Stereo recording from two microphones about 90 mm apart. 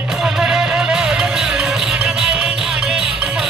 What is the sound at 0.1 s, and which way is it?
Music, 5° right (ahead or behind).